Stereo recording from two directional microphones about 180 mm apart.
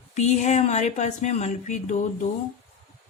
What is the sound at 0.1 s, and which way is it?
Speech, 40° left (ahead or behind).